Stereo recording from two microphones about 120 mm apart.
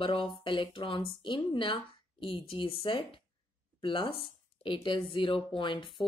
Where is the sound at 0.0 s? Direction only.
45° left (ahead or behind).